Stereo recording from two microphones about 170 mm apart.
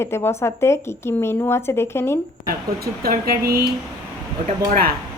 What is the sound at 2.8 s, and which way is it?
Speech, 60° right (ahead or behind).